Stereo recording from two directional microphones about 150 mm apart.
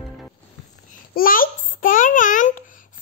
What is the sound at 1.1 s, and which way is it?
A child's voice, 70° left (ahead or behind).